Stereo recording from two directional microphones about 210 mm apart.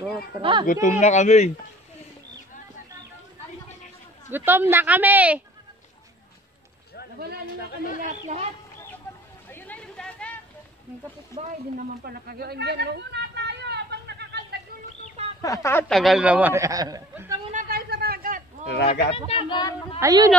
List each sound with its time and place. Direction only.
0.3 s speech: 25° right (ahead or behind)
0.7 s speech: 35° left (ahead or behind)
4.3 s a man's voice: 10° right (ahead or behind)
7.8 s speech: 40° left (ahead or behind)
8.1 s a child's voice: 35° right (ahead or behind)
9.5 s a sound: 10° left (ahead or behind)
12.1 s a sound: 50° right (ahead or behind)
15.4 s speech: 15° left (ahead or behind)
15.9 s a man's voice: centre (ahead or behind)
17.5 s a sound: 40° right (ahead or behind)
19.0 s speech: 25° left (ahead or behind)
20.0 s a man's voice: 15° right (ahead or behind)